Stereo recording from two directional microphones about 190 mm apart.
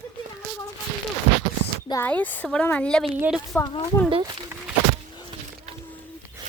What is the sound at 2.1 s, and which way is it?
Speech, 5° left (ahead or behind).